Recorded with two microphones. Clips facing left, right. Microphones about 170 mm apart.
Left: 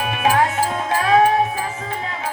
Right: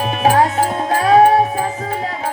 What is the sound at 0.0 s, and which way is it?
Music, 35° right (ahead or behind).